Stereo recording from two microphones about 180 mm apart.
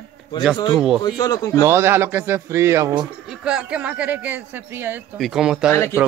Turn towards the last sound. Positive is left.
turn(degrees=15)  # may be behind; listen again after turning